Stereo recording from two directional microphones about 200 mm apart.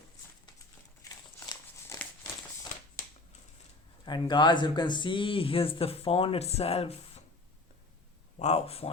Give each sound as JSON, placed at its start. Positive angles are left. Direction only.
{"t": 1.0, "sound": "crumpling", "side_deg": 15}
{"t": 4.0, "sound": "speech", "side_deg": 20}
{"t": 8.4, "sound": "speech", "side_deg": 30}